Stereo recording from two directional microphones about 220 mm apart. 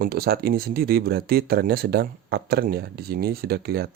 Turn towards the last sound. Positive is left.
turn(degrees=-45)  # may be behind; listen again after turning